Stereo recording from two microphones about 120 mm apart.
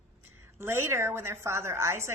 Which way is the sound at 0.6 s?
20° right (ahead or behind).